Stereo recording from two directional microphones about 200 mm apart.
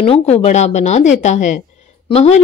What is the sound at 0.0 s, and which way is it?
A woman's voice, 30° left (ahead or behind).